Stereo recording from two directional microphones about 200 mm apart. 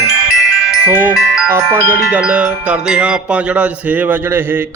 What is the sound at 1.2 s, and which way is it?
Music, 5° right (ahead or behind).